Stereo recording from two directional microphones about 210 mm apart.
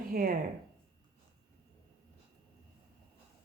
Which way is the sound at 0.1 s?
45° right (ahead or behind).